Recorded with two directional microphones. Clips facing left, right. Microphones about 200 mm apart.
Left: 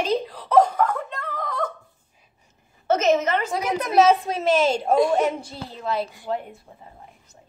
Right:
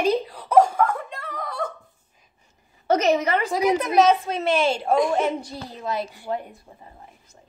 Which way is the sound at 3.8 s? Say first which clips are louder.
Left 3 dB; 5° left (ahead or behind).